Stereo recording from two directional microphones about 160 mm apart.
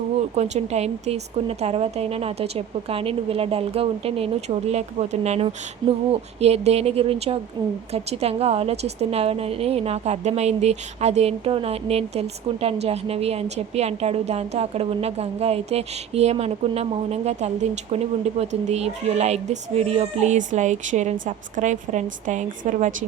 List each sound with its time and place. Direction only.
0.3 s a woman's voice: 45° right (ahead or behind)